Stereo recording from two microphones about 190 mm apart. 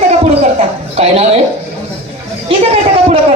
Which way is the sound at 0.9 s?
35° right (ahead or behind).